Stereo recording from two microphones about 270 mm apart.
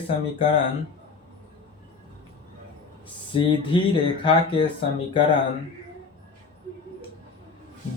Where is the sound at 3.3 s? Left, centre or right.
Centre.